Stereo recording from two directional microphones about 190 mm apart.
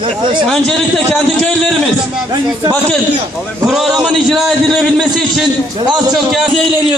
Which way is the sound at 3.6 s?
Centre (ahead or behind).